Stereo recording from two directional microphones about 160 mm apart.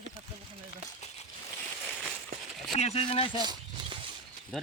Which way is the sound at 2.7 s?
40° left (ahead or behind).